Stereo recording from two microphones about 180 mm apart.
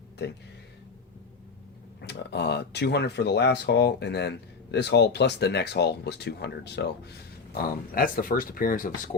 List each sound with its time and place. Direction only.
0.2 s speech: 65° left (ahead or behind)
2.0 s speech: 65° left (ahead or behind)
7.6 s speech: 50° left (ahead or behind)